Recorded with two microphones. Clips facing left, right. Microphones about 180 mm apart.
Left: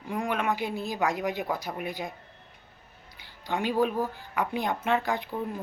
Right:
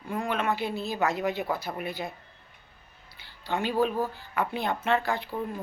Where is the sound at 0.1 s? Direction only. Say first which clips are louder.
Even; 15° left (ahead or behind).